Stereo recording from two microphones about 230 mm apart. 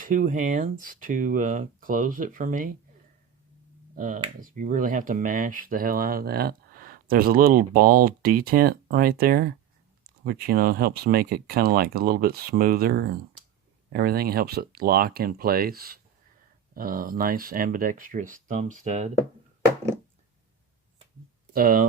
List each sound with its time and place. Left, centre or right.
0.0 s speech: right
3.9 s speech: right
21.5 s speech: right